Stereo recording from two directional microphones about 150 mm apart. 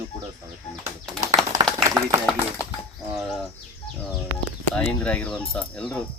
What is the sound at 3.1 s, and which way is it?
Speech, centre (ahead or behind).